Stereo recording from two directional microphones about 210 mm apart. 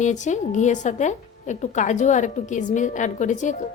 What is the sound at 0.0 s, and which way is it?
A woman's voice, 35° left (ahead or behind).